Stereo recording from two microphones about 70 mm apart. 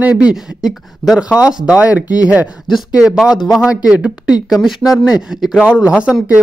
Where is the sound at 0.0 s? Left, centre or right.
Centre.